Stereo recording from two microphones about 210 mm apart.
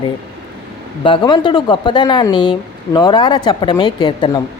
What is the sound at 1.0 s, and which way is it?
Speech, 20° left (ahead or behind).